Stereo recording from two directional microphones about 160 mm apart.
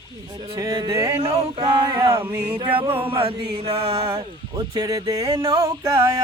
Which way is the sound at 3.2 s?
35° right (ahead or behind).